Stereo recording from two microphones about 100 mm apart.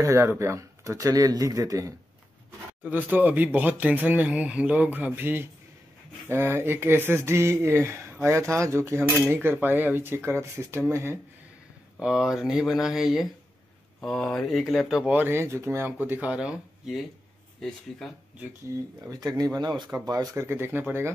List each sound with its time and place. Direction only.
0.0 s speech: 30° right (ahead or behind)
2.8 s speech: 20° right (ahead or behind)
12.0 s speech: 5° right (ahead or behind)
15.1 s speech: 25° right (ahead or behind); by 17.0 s 5° right (ahead or behind)
17.6 s speech: 5° left (ahead or behind)
19.0 s speech: 40° right (ahead or behind)
20.4 s speech: 25° right (ahead or behind)